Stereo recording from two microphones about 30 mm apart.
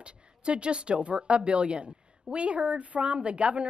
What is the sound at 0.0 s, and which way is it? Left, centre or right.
A woman's voice, right.